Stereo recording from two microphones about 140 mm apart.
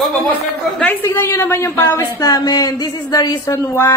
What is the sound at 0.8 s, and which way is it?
A woman's voice, 10° left (ahead or behind).